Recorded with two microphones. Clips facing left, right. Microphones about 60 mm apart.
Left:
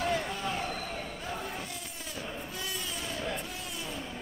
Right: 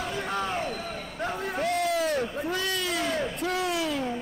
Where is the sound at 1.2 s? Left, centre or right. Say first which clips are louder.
Right 9 dB; right.